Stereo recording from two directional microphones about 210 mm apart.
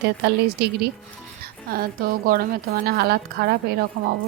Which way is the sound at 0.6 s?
50° right (ahead or behind).